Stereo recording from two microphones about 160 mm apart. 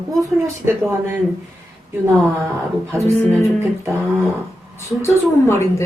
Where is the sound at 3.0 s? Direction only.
20° left (ahead or behind).